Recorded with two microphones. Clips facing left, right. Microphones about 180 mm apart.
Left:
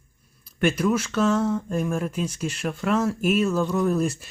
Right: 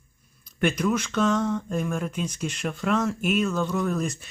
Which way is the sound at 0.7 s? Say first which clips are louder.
Left 2 dB; 5° left (ahead or behind).